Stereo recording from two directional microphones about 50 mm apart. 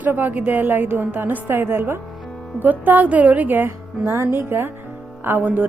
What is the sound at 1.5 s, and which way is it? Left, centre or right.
Speech, right.